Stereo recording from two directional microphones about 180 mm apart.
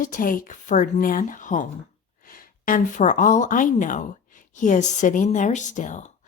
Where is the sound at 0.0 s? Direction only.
50° left (ahead or behind).